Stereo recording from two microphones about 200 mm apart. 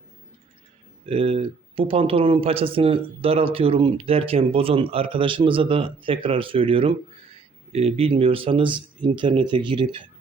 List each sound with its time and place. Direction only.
1.0 s speech: 25° right (ahead or behind)